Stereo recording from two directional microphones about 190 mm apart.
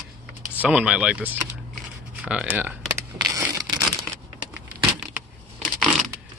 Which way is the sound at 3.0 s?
15° right (ahead or behind).